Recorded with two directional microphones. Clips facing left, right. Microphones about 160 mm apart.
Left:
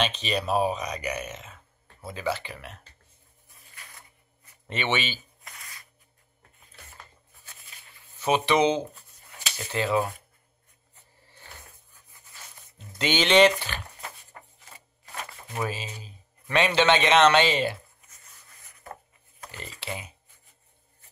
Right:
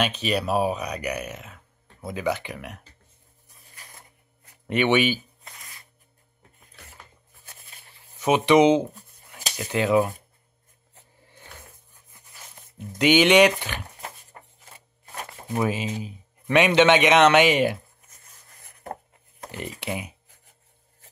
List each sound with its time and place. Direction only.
0.0 s speech: 10° right (ahead or behind)
4.6 s speech: 10° right (ahead or behind)
5.4 s a sound: 25° right (ahead or behind)
8.2 s a sound: 20° right (ahead or behind)
9.6 s speech: 10° right (ahead or behind)
12.7 s speech: 15° right (ahead or behind)
15.5 s speech: 20° right (ahead or behind)
18.6 s rub: 50° right (ahead or behind)
19.5 s speech: 15° right (ahead or behind)